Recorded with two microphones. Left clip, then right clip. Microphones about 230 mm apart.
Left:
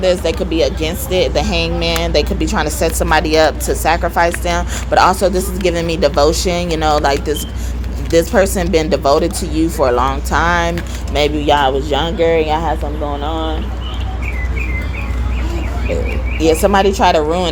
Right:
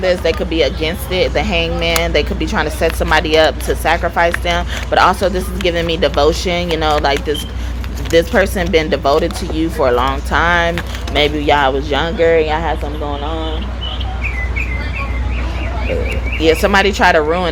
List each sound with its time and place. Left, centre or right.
0.0 s speech: left
16.6 s speech: left